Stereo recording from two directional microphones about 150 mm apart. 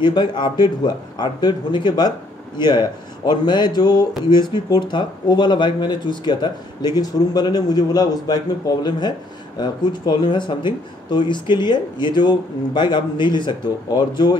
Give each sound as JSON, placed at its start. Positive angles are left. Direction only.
{"t": 0.0, "sound": "speech", "side_deg": 30}